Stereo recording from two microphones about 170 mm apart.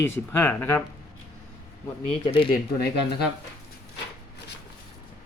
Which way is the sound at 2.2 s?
30° left (ahead or behind).